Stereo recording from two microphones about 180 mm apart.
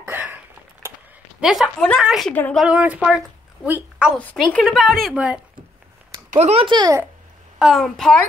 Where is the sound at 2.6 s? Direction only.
5° right (ahead or behind).